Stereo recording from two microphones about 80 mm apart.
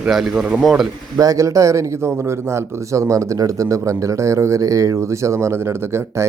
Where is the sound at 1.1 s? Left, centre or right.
Right.